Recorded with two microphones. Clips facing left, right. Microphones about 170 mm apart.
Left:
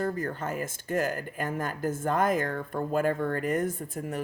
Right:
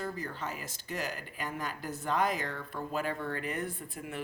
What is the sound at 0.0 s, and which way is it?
Speech, 50° left (ahead or behind).